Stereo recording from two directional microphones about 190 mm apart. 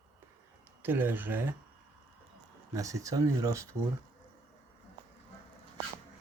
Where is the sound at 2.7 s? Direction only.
15° right (ahead or behind).